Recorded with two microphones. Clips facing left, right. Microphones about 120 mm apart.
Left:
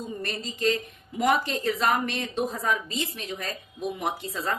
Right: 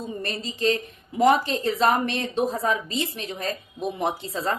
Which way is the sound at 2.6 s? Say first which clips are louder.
Right 3 dB; 35° right (ahead or behind).